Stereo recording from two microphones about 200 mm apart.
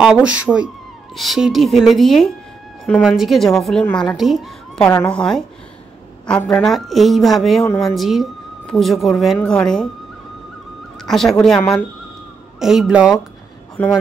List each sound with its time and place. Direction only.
0.0 s a woman's voice: 5° right (ahead or behind)
11.1 s a woman's voice: centre (ahead or behind)